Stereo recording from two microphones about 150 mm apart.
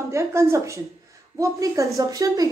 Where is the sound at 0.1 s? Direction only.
20° right (ahead or behind).